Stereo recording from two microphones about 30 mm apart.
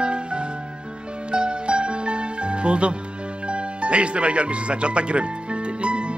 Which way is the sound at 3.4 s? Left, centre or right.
Right.